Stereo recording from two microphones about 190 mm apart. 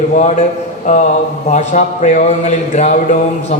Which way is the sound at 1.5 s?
40° left (ahead or behind).